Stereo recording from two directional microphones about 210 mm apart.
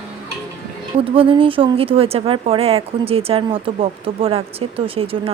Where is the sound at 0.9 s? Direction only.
25° right (ahead or behind).